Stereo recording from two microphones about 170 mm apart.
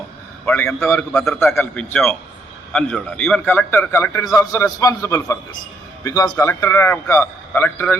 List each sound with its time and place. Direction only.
0.4 s a man's voice: 15° left (ahead or behind)